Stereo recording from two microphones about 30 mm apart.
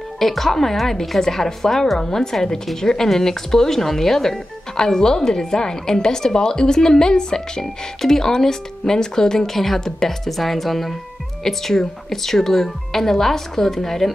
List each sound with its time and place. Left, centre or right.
0.2 s a woman's voice: centre
10.2 s speech: centre